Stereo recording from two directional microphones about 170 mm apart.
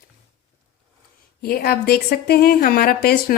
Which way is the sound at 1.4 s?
60° left (ahead or behind).